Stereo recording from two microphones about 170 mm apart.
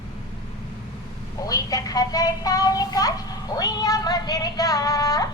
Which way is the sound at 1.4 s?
20° left (ahead or behind).